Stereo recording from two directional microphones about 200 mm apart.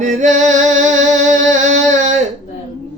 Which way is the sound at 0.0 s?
40° right (ahead or behind).